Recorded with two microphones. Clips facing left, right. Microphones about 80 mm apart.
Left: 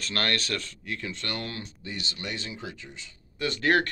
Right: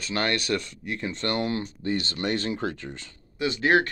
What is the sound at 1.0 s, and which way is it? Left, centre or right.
Speech, right.